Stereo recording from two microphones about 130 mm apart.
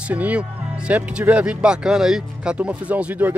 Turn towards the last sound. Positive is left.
turn(degrees=-10)  # may be behind; listen again after turning